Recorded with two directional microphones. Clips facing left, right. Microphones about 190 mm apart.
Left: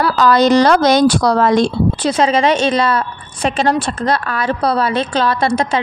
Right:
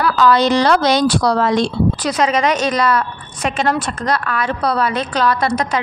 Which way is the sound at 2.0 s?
30° left (ahead or behind).